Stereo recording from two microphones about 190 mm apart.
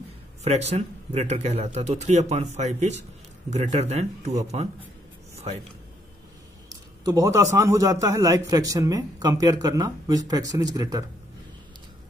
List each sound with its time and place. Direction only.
0.4 s speech: 35° right (ahead or behind)
6.7 s a sound: 20° right (ahead or behind)
7.5 s speech: 15° right (ahead or behind)